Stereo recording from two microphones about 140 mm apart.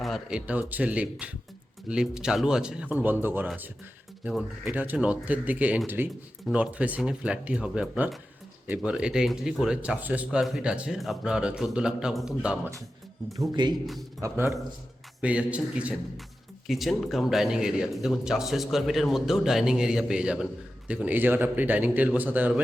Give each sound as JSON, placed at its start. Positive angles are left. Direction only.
{"t": 0.0, "sound": "speech", "side_deg": -5}
{"t": 4.2, "sound": "speech", "side_deg": -5}
{"t": 13.3, "sound": "speech", "side_deg": -30}
{"t": 15.2, "sound": "speech", "side_deg": -10}